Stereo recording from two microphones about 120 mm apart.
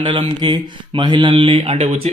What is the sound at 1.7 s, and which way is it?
Speech, 60° right (ahead or behind).